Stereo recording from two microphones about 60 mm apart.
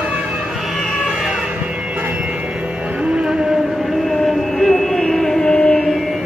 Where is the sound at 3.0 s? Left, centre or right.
Centre.